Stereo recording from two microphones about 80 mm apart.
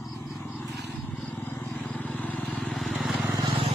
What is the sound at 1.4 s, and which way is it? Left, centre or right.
Vehicle, left.